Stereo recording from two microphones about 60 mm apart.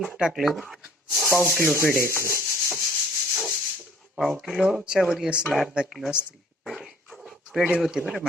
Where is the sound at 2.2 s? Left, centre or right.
Right.